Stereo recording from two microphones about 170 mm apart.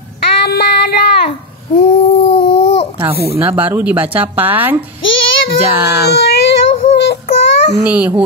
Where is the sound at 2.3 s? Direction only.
30° left (ahead or behind).